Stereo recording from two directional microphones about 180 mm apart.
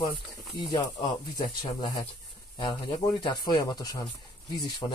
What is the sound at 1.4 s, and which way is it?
Speech, 25° left (ahead or behind).